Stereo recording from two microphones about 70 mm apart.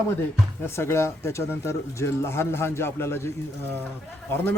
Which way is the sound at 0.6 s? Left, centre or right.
Left.